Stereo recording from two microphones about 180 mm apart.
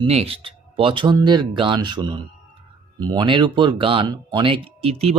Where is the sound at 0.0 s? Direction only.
35° right (ahead or behind).